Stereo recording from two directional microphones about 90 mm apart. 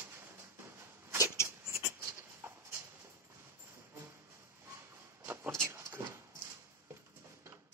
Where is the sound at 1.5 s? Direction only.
30° right (ahead or behind).